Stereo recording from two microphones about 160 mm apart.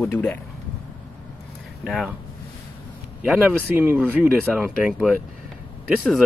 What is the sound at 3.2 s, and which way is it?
Speech, 10° right (ahead or behind).